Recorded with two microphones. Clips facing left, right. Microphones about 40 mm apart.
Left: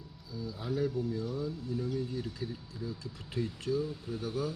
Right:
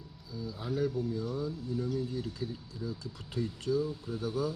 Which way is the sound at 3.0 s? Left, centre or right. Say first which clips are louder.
Left 2 dB; left.